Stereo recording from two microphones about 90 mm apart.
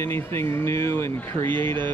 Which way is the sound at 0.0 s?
25° left (ahead or behind).